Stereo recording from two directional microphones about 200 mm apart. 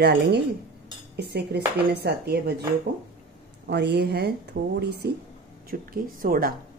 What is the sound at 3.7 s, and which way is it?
A woman's voice, 55° right (ahead or behind).